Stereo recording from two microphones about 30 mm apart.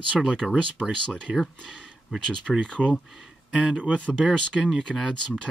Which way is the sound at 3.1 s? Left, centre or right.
Right.